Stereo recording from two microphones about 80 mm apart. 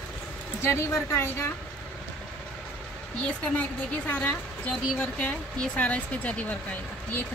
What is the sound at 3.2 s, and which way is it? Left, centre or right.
Speech, centre.